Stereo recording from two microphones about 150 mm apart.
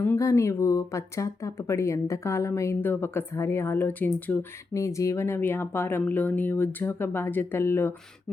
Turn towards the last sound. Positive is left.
turn(degrees=15)  # may be behind; listen again after turning